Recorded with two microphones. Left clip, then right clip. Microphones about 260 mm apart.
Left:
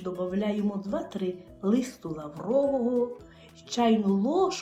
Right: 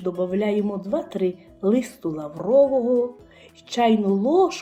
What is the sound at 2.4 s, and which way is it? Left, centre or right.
Music, right.